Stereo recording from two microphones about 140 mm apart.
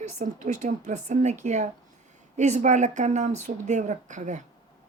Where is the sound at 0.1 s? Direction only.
55° right (ahead or behind).